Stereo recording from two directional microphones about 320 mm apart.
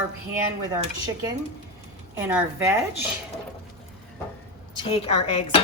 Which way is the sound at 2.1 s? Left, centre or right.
Centre.